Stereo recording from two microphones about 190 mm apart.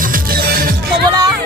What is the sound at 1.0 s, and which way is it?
Music, 20° right (ahead or behind).